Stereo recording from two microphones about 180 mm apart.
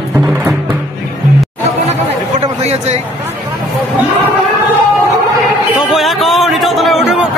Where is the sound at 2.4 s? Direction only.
40° right (ahead or behind).